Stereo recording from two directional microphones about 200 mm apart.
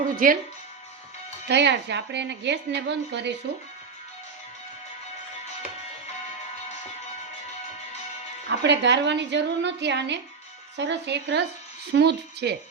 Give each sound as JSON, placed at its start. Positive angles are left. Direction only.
{"t": 0.2, "sound": "speech", "side_deg": -45}
{"t": 1.5, "sound": "a woman's voice", "side_deg": -60}
{"t": 8.4, "sound": "a woman's voice", "side_deg": -60}